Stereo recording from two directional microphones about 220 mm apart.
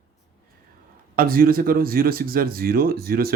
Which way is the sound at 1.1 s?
40° right (ahead or behind).